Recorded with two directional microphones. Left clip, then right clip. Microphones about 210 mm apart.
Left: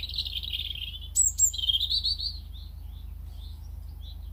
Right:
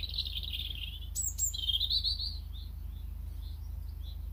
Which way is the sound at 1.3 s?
40° left (ahead or behind).